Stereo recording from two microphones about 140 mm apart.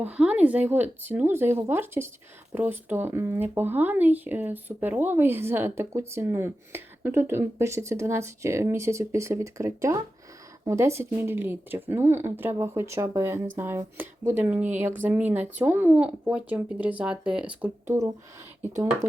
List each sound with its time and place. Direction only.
0.0 s speech: 10° right (ahead or behind)